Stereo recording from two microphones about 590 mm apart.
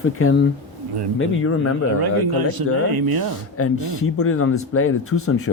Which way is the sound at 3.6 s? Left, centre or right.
Left.